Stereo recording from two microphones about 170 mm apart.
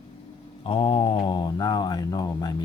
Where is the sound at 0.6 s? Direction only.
35° left (ahead or behind).